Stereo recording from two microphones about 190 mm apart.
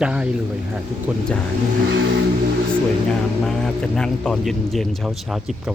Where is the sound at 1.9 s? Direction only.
65° right (ahead or behind).